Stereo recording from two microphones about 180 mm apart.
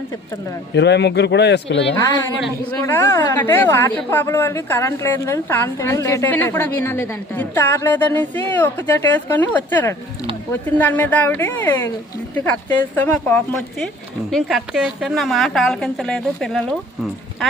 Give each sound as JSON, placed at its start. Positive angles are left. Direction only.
{"t": 0.8, "sound": "speech", "side_deg": 70}
{"t": 2.8, "sound": "a woman's voice", "side_deg": 10}
{"t": 13.0, "sound": "a woman's voice", "side_deg": 10}
{"t": 14.3, "sound": "a woman's voice", "side_deg": -5}